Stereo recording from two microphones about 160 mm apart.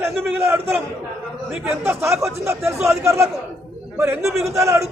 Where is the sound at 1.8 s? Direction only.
15° right (ahead or behind).